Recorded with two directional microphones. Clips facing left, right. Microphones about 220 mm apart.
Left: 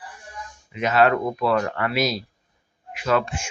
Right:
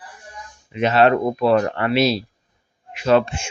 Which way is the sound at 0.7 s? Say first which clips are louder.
Right 3 dB; 30° right (ahead or behind).